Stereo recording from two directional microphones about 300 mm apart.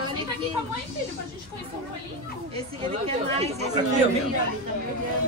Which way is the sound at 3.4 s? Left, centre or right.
Right.